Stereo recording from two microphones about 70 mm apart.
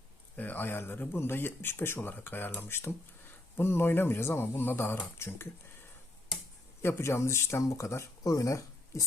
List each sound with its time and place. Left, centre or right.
0.3 s speech: left
6.8 s speech: left